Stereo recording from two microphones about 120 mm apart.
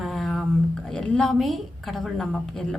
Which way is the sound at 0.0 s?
Centre (ahead or behind).